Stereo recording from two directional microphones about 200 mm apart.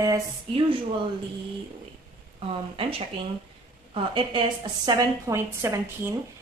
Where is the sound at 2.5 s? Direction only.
30° right (ahead or behind).